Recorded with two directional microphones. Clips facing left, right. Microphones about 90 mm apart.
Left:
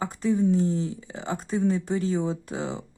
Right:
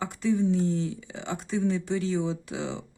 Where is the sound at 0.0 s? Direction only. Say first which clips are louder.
Left 2 dB; 35° left (ahead or behind).